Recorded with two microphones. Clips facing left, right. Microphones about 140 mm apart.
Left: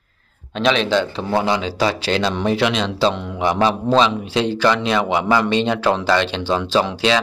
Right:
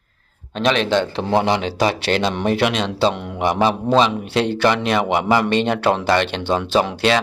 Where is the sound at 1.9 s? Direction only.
60° right (ahead or behind).